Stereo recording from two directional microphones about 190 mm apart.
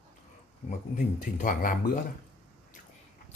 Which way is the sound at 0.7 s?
40° left (ahead or behind).